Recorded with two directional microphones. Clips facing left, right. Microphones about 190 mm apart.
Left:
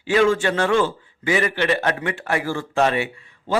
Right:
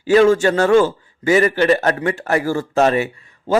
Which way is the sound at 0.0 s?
40° right (ahead or behind).